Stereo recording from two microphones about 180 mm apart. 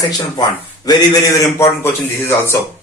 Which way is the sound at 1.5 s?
15° left (ahead or behind).